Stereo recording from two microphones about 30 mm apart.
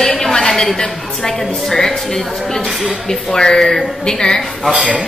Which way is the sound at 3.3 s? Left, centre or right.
Left.